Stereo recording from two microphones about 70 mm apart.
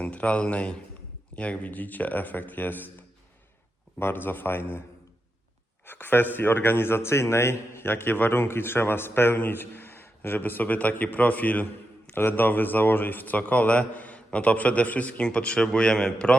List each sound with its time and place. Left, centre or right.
0.0 s a man's voice: centre
4.0 s a man's voice: left
5.8 s speech: left; by 16.4 s centre